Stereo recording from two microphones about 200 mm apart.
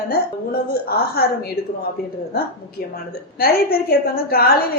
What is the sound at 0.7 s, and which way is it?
Speech, 50° left (ahead or behind).